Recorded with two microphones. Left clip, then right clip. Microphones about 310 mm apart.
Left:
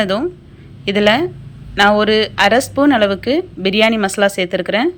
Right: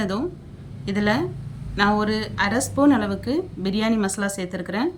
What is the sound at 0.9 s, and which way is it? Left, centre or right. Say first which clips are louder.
Speech: left 10 dB; centre.